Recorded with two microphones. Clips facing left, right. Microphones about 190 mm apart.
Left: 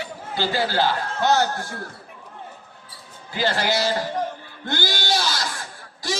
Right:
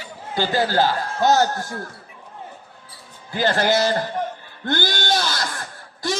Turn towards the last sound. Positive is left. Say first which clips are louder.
# right 3 dB
turn(degrees=-55)  # may be behind; listen again after turning